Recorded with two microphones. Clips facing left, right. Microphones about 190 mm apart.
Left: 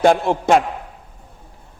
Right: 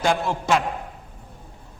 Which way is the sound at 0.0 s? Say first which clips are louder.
Left 8 dB; 55° left (ahead or behind).